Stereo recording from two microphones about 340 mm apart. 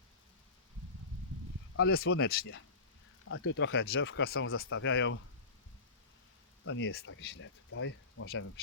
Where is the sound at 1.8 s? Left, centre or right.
Left.